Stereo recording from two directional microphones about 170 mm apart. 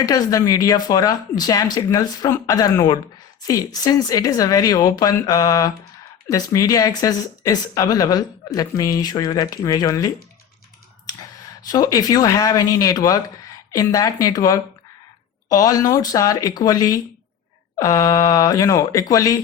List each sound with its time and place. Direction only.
0.0 s speech: 20° left (ahead or behind)
11.7 s speech: 20° left (ahead or behind)